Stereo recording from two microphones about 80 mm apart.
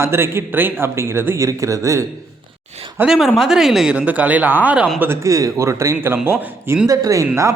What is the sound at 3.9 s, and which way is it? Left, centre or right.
Speech, right.